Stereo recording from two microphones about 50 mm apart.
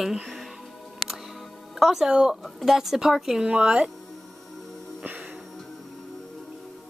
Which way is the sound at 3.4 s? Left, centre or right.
Right.